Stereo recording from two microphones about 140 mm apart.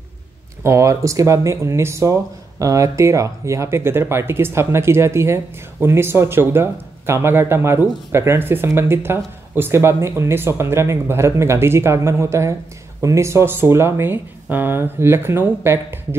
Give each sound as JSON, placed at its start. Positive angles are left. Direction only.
{"t": 0.7, "sound": "speech", "side_deg": -20}